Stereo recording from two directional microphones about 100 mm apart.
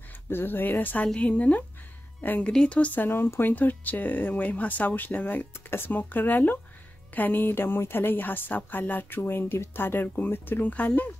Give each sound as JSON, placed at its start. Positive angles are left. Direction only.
{"t": 0.3, "sound": "a woman's voice", "side_deg": 20}